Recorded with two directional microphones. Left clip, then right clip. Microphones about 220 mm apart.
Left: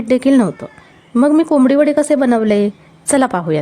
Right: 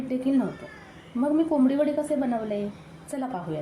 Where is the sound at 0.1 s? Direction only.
50° left (ahead or behind).